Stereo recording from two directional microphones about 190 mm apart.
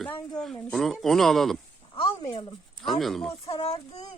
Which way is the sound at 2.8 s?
Centre (ahead or behind).